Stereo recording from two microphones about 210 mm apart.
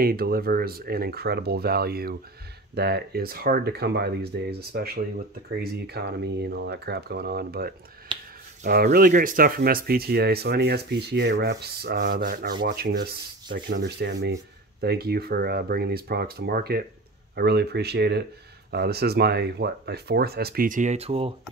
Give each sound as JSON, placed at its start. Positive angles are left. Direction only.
{"t": 0.0, "sound": "speech", "side_deg": -45}
{"t": 8.1, "sound": "finger snapping", "side_deg": -25}
{"t": 8.6, "sound": "speech", "side_deg": -45}